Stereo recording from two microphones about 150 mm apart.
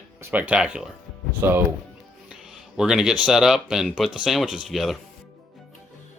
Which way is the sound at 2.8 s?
5° right (ahead or behind).